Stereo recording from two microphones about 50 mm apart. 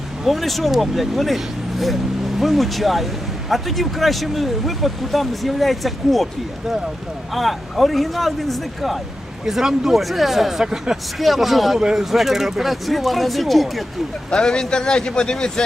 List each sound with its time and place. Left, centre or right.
0.3 s speech: centre
2.4 s speech: centre
7.3 s speech: centre
10.6 s speech: centre
11.2 s speech: centre
11.8 s speech: centre
12.1 s speech: centre
14.3 s speech: centre